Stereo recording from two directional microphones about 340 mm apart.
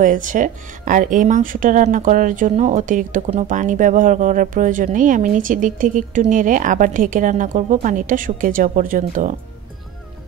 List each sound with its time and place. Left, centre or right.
0.0 s speech: right